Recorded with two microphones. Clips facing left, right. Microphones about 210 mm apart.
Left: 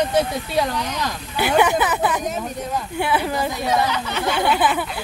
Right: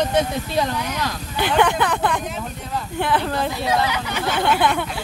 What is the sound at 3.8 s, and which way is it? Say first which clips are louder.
Speech: left 1 dB; 10° right (ahead or behind).